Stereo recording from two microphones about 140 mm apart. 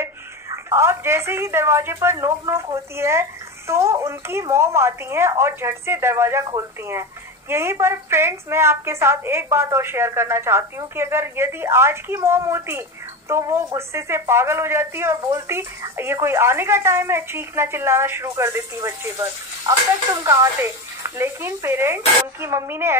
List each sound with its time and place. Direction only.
0.7 s a woman's voice: 20° right (ahead or behind)